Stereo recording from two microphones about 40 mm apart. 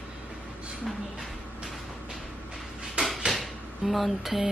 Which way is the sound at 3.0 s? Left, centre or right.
Right.